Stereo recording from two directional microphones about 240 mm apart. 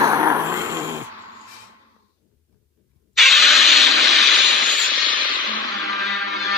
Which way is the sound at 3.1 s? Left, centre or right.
Centre.